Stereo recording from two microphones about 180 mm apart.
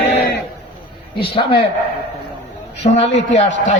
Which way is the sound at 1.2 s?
30° left (ahead or behind).